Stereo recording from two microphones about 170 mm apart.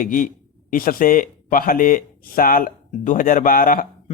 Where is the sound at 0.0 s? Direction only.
55° left (ahead or behind).